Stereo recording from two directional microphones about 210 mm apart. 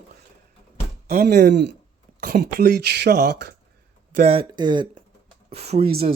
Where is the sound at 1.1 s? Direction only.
45° right (ahead or behind).